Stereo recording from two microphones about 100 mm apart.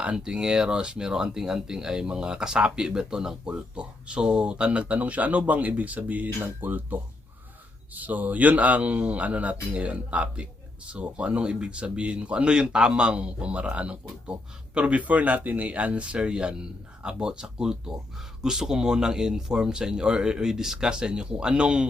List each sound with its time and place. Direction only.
0.0 s speech: 10° right (ahead or behind)